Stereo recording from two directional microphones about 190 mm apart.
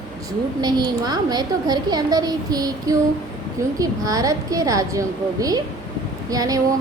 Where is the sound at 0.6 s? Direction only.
20° right (ahead or behind).